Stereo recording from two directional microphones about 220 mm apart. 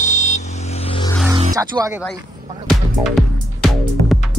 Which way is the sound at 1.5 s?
15° right (ahead or behind).